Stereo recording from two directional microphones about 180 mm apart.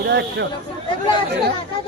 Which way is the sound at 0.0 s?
70° right (ahead or behind).